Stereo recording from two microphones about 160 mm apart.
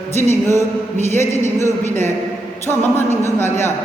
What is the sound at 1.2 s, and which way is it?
A man's voice, 15° left (ahead or behind).